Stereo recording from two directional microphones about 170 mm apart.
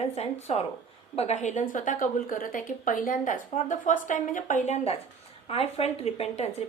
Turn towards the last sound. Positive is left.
turn(degrees=40)  # may be behind; listen again after turning